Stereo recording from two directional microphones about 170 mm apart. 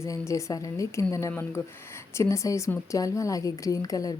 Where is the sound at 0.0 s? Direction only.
20° left (ahead or behind).